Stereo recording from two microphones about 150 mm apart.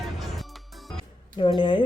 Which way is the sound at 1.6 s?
30° left (ahead or behind).